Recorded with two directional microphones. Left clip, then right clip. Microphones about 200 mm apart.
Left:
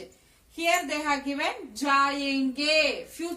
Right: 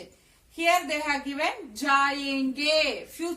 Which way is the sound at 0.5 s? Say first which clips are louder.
Right 2 dB; 10° left (ahead or behind).